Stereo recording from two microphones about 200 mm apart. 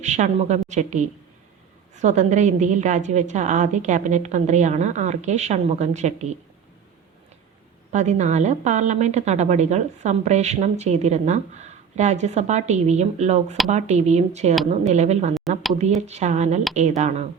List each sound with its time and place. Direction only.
0.0 s a woman's voice: 35° right (ahead or behind)
7.9 s a woman's voice: 35° right (ahead or behind)